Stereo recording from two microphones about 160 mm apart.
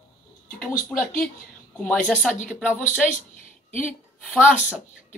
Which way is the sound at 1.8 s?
5° left (ahead or behind).